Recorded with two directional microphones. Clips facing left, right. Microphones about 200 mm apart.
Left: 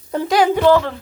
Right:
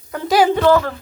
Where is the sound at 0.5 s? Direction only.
15° left (ahead or behind).